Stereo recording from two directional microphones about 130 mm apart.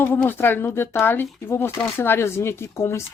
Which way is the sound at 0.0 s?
15° left (ahead or behind).